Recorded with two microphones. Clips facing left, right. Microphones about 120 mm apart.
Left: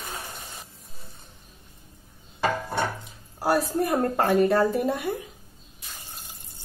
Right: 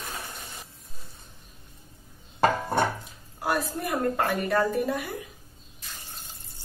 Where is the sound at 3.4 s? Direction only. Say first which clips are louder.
Left 5 dB; 35° left (ahead or behind).